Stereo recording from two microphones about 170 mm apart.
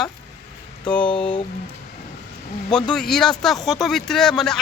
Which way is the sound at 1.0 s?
30° left (ahead or behind).